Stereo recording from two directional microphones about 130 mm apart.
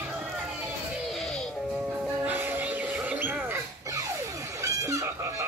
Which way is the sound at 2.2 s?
15° right (ahead or behind).